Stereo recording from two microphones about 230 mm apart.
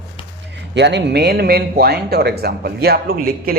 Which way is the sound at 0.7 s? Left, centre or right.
Right.